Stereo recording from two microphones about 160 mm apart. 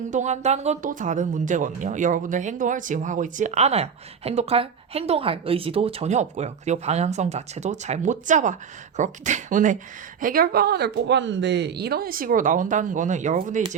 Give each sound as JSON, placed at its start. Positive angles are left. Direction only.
{"t": 0.1, "sound": "speech", "side_deg": -45}